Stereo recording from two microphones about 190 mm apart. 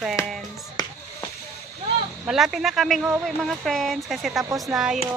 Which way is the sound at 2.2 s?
Centre (ahead or behind).